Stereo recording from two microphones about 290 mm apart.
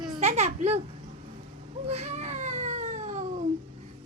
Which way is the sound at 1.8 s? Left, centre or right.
Right.